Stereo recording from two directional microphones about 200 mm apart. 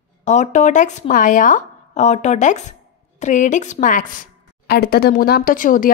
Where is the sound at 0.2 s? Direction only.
35° left (ahead or behind).